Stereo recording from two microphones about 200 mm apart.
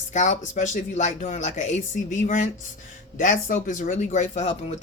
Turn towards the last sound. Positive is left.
turn(degrees=35)  # may be behind; listen again after turning